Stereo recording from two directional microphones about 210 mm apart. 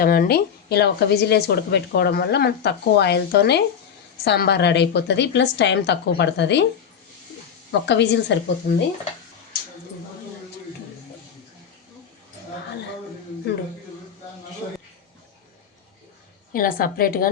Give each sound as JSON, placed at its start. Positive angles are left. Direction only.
{"t": 0.0, "sound": "a woman's voice", "side_deg": 45}
{"t": 7.7, "sound": "a woman's voice", "side_deg": 55}
{"t": 16.5, "sound": "a woman's voice", "side_deg": 45}